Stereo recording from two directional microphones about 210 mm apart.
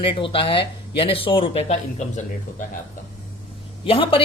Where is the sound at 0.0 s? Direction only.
25° left (ahead or behind).